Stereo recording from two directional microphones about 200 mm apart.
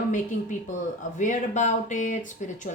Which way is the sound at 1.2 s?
40° left (ahead or behind).